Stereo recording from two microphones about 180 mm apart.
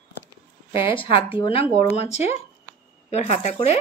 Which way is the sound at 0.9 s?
30° left (ahead or behind).